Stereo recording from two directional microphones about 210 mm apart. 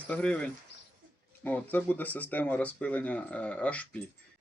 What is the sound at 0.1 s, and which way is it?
Speech, 5° left (ahead or behind).